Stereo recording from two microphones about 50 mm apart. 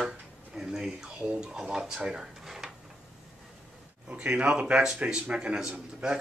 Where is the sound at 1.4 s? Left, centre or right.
Centre.